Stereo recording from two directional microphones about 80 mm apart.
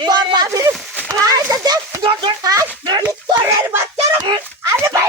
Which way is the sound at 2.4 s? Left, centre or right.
Right.